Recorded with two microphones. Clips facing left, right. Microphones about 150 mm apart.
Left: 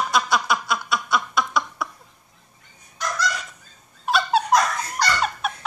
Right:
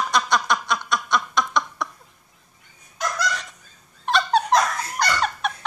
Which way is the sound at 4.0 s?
5° left (ahead or behind).